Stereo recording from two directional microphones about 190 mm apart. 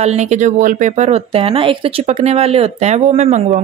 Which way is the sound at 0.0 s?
35° right (ahead or behind).